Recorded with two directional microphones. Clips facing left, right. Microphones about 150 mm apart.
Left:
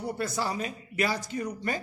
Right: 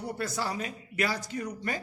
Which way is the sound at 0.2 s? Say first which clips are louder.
Left 1 dB; 20° left (ahead or behind).